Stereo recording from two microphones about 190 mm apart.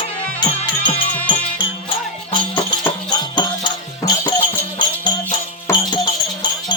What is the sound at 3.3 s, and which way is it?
Music, 25° left (ahead or behind).